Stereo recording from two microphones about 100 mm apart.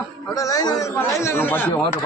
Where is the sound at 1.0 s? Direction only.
25° left (ahead or behind).